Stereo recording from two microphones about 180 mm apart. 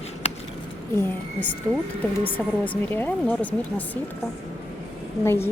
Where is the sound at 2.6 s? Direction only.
10° left (ahead or behind).